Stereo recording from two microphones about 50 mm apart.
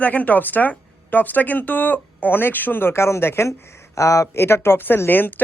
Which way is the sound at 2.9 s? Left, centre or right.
Left.